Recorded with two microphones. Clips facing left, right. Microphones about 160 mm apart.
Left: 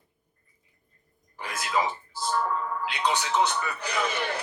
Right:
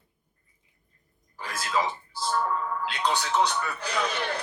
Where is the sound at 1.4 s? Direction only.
10° left (ahead or behind).